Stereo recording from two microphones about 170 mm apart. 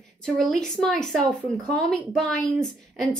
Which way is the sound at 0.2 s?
5° left (ahead or behind).